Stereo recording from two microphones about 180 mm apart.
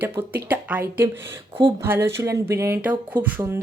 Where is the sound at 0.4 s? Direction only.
10° right (ahead or behind).